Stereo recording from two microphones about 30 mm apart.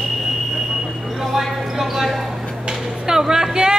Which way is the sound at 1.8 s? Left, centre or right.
Centre.